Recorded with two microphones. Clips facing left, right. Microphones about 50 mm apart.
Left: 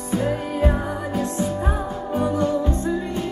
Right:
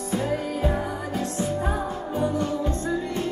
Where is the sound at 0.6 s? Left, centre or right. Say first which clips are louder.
Left 6 dB; left.